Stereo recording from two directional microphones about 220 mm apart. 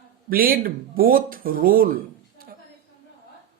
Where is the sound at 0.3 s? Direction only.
40° right (ahead or behind).